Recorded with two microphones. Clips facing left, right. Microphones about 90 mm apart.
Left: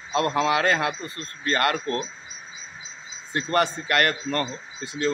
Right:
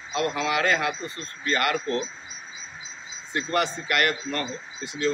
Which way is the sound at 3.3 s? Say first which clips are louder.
Left 2 dB; 40° left (ahead or behind).